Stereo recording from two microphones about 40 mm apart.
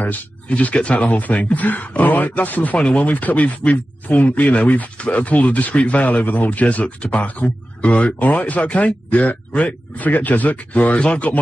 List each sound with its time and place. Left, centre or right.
0.0 s speech: left